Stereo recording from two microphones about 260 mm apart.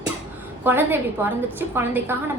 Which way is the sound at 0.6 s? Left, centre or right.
Centre.